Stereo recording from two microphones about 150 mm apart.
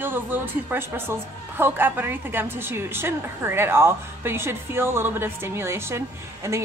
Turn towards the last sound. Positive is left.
turn(degrees=-20)  # may be behind; listen again after turning